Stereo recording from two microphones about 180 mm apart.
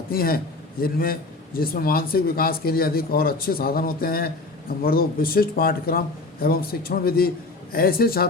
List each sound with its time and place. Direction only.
0.1 s a man's voice: 55° left (ahead or behind)